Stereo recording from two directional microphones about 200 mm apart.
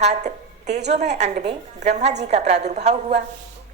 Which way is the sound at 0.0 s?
35° right (ahead or behind).